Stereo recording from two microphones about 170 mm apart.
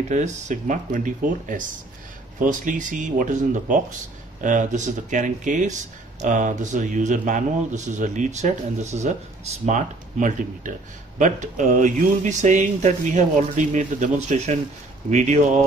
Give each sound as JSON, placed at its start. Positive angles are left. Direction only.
{"t": 0.1, "sound": "speech", "side_deg": -45}